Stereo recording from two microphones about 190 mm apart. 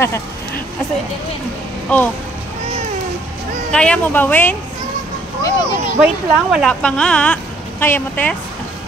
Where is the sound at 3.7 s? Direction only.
5° left (ahead or behind).